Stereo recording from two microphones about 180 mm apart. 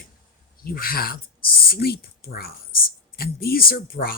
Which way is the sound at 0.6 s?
55° left (ahead or behind).